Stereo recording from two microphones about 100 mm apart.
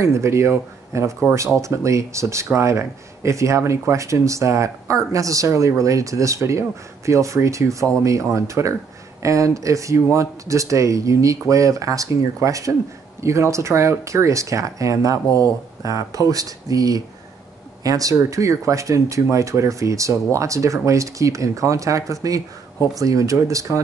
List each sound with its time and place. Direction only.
0.0 s speech: 30° right (ahead or behind)